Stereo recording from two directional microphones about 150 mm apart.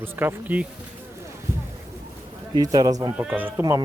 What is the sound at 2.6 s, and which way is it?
Speech, 25° right (ahead or behind).